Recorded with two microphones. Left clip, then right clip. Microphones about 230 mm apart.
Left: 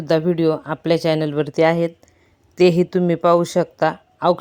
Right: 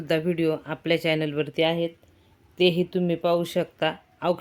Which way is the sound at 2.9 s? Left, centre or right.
Left.